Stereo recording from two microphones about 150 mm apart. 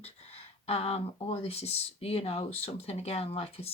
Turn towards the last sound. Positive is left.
turn(degrees=40)  # may be behind; listen again after turning